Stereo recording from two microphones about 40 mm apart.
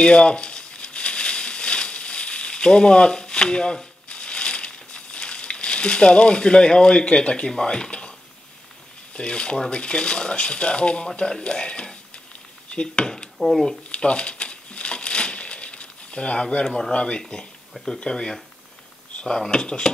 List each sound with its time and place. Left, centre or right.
0.0 s crumpling: left
9.1 s speech: left
13.4 s speech: centre
13.8 s crumpling: left
16.9 s speech: left
17.7 s speech: centre